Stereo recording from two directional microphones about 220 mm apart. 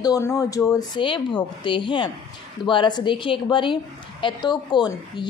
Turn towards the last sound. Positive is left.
turn(degrees=20)  # may be behind; listen again after turning